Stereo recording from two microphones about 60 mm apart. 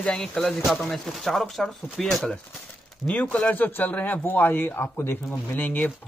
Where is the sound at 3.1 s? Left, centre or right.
Centre.